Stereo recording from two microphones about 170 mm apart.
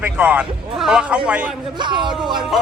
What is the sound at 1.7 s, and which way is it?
Speech, 25° right (ahead or behind).